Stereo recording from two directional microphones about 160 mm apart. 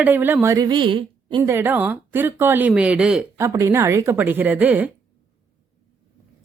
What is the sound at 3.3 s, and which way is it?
Speech, 20° right (ahead or behind).